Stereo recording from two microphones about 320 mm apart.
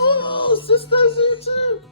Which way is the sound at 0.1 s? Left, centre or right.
Centre.